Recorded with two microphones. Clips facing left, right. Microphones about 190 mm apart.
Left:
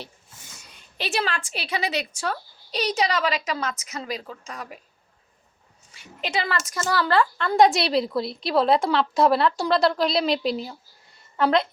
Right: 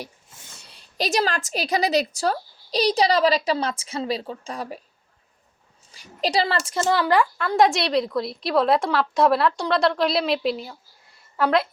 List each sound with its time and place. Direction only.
0.6 s a woman's voice: 35° right (ahead or behind)
5.9 s a woman's voice: 35° right (ahead or behind)
7.0 s a woman's voice: 15° right (ahead or behind)